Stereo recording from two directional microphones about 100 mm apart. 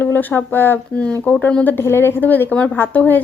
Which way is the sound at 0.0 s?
20° left (ahead or behind).